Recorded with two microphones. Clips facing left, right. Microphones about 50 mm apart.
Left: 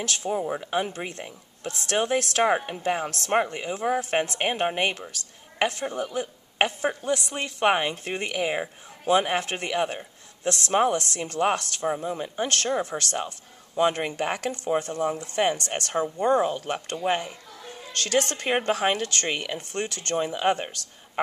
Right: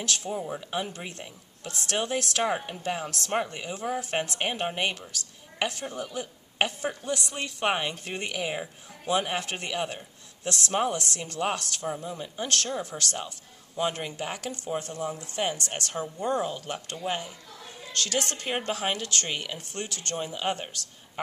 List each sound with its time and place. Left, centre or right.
0.0 s speech: left
0.6 s speech: left